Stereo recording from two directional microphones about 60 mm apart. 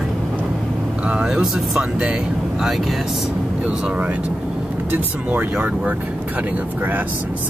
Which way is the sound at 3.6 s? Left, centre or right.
Centre.